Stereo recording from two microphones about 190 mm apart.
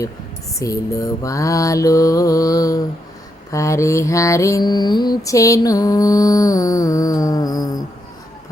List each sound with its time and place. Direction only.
0.6 s mantra: 15° left (ahead or behind)